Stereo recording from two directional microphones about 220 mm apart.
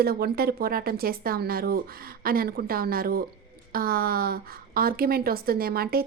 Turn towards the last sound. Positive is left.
turn(degrees=-45)  # may be behind; listen again after turning